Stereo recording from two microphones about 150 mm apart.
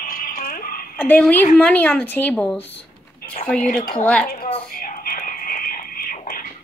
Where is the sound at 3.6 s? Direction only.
70° left (ahead or behind).